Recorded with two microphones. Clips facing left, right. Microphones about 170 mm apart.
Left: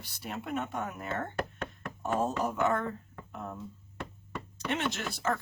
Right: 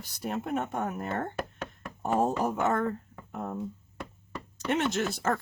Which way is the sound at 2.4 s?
50° right (ahead or behind).